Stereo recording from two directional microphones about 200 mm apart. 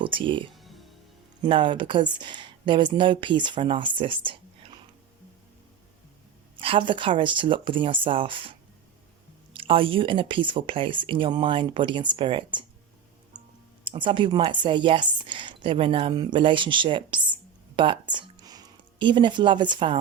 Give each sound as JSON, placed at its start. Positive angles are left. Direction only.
{"t": 0.0, "sound": "speech", "side_deg": -25}
{"t": 0.5, "sound": "music", "side_deg": 0}
{"t": 1.5, "sound": "speech", "side_deg": -25}
{"t": 6.6, "sound": "speech", "side_deg": -25}
{"t": 13.8, "sound": "speech", "side_deg": -25}